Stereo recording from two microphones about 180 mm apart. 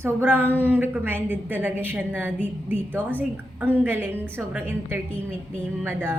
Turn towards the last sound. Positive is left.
turn(degrees=-10)  # may be behind; listen again after turning